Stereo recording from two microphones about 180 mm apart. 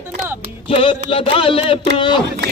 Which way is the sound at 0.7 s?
30° left (ahead or behind).